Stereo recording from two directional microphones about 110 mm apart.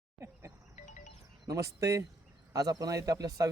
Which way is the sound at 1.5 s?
30° right (ahead or behind).